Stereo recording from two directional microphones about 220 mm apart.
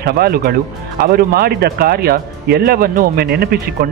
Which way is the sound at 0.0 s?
45° right (ahead or behind).